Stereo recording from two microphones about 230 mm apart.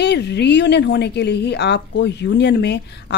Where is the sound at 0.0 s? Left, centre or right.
Left.